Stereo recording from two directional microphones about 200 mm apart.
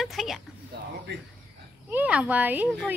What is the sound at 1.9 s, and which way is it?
Speech, 5° right (ahead or behind).